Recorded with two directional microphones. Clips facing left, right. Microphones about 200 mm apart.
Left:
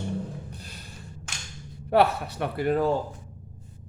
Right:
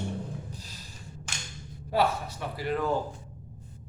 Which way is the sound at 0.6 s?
60° left (ahead or behind).